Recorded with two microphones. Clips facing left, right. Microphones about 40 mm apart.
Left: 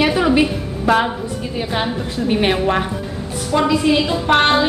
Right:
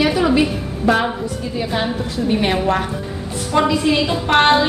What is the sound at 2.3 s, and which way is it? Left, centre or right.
Speech, centre.